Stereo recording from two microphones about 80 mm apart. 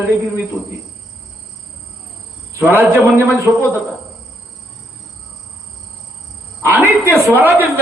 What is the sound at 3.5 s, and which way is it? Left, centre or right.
Speech, right.